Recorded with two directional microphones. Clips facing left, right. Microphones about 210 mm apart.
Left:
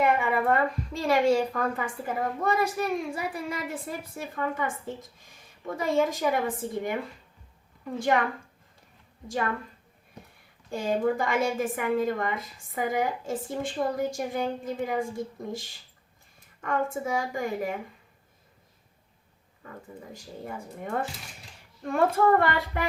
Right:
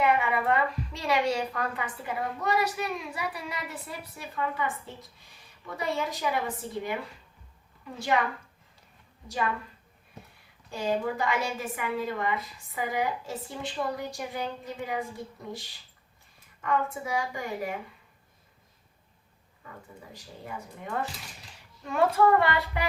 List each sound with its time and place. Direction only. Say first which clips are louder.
0.0 s a woman's voice: left 1 dB; 50° left (ahead or behind)
10.7 s a woman's voice: left 3 dB; 50° left (ahead or behind)
20.4 s a woman's voice: left 3 dB; 45° left (ahead or behind)